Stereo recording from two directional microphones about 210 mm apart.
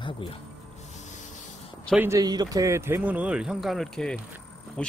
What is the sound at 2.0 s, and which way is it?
Speech, 15° right (ahead or behind).